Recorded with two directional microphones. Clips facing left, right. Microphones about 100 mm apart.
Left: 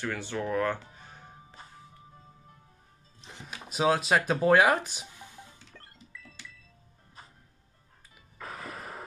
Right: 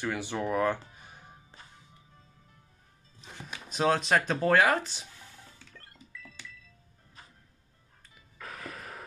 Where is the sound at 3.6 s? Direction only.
5° left (ahead or behind).